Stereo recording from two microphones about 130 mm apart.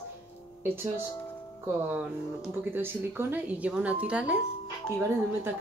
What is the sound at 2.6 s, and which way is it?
A woman's voice, 15° right (ahead or behind).